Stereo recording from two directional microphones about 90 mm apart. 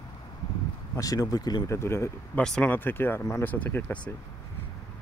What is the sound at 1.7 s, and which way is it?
Speech, 30° left (ahead or behind).